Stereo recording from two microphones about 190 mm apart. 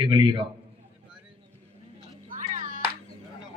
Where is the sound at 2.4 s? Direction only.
40° right (ahead or behind).